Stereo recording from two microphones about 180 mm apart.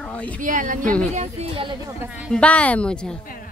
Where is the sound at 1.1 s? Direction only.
35° right (ahead or behind).